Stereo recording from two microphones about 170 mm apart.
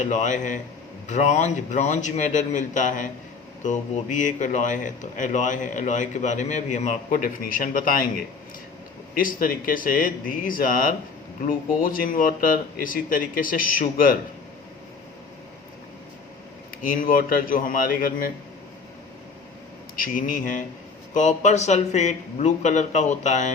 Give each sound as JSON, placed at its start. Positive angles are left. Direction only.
{"t": 0.0, "sound": "speech", "side_deg": 45}
{"t": 9.1, "sound": "speech", "side_deg": 55}
{"t": 16.8, "sound": "speech", "side_deg": 55}
{"t": 20.0, "sound": "speech", "side_deg": 55}